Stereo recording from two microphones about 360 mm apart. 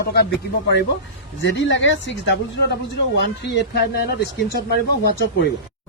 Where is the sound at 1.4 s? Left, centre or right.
Left.